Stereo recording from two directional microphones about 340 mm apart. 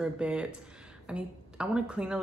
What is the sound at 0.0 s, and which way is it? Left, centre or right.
Speech, centre.